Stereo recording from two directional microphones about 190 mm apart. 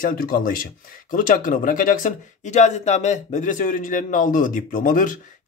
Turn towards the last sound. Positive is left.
turn(degrees=45)  # may be behind; listen again after turning